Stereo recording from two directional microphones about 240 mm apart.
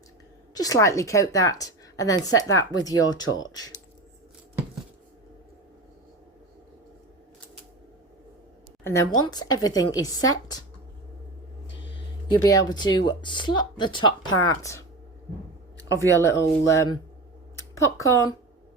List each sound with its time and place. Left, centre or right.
0.5 s a woman's voice: centre
8.8 s a woman's voice: centre
12.3 s a woman's voice: centre
16.2 s a woman's voice: centre